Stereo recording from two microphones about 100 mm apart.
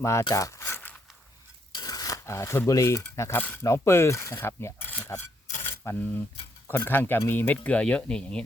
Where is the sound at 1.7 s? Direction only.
40° left (ahead or behind).